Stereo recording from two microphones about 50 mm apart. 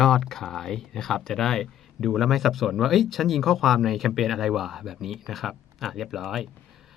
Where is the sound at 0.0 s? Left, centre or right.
Centre.